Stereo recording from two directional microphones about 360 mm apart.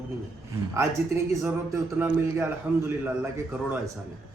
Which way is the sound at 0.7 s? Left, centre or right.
Centre.